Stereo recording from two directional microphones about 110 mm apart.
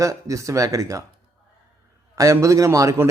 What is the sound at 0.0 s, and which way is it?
Speech, 30° right (ahead or behind).